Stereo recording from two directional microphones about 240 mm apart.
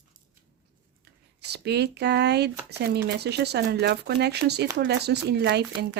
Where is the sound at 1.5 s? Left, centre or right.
Right.